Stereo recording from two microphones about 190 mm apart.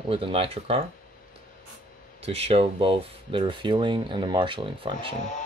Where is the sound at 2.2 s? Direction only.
30° right (ahead or behind).